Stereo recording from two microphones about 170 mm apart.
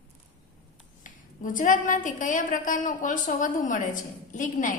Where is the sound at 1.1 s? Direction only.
50° left (ahead or behind).